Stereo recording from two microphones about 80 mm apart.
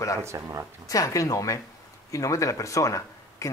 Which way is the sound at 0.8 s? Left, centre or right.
Left.